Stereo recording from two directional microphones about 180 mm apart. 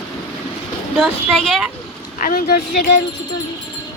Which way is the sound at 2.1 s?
50° left (ahead or behind).